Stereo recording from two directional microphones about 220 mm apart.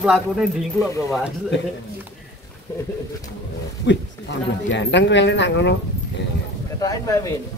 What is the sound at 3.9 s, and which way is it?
Speech, 55° left (ahead or behind).